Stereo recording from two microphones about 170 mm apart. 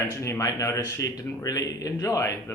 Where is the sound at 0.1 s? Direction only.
15° left (ahead or behind).